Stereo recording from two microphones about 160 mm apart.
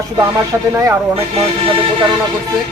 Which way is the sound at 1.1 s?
35° right (ahead or behind).